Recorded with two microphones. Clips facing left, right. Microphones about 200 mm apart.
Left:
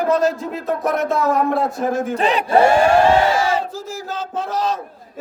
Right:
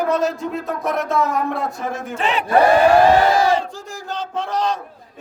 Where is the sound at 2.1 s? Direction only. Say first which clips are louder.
Left 2 dB; 40° left (ahead or behind).